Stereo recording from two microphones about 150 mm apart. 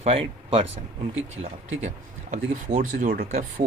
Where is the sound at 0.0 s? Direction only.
40° right (ahead or behind).